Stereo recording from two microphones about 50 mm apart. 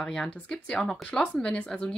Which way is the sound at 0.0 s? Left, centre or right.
Centre.